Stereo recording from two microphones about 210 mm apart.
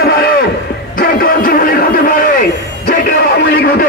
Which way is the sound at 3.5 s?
45° left (ahead or behind).